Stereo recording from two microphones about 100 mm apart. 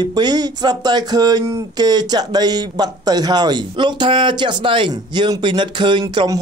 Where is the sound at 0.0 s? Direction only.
45° right (ahead or behind).